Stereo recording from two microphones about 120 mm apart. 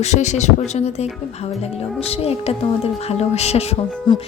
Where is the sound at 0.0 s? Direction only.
70° left (ahead or behind).